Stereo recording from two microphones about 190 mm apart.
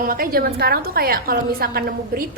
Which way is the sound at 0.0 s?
50° right (ahead or behind).